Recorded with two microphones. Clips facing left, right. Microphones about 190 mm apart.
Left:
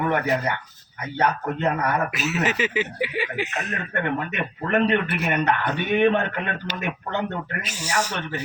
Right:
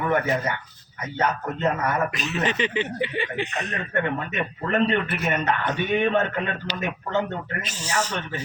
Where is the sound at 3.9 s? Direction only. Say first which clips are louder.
Even; 55° left (ahead or behind).